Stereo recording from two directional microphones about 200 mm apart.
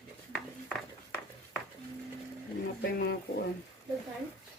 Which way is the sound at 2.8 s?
50° left (ahead or behind).